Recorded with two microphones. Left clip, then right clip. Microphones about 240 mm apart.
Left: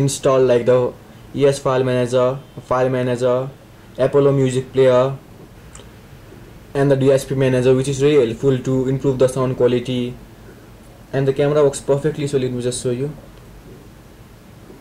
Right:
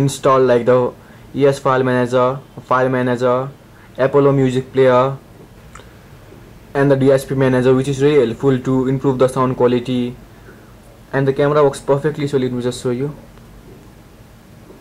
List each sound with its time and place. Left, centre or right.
0.0 s speech: centre
0.6 s speech: right
1.3 s speech: centre
6.7 s speech: centre